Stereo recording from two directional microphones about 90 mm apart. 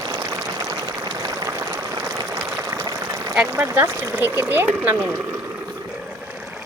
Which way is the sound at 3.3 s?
15° right (ahead or behind).